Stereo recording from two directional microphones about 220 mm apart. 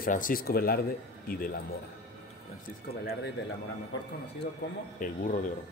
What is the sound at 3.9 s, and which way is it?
Speech, 55° left (ahead or behind).